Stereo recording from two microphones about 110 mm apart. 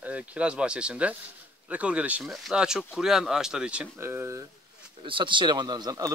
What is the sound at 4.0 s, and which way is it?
Speech, 20° right (ahead or behind).